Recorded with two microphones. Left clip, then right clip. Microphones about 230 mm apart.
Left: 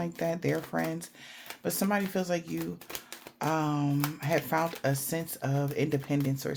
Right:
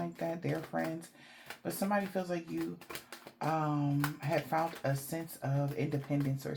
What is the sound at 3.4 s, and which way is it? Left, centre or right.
Speech, left.